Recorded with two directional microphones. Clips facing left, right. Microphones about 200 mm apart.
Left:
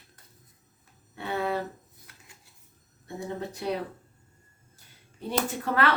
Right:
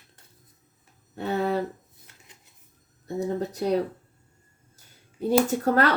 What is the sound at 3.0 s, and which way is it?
Speech, 40° right (ahead or behind).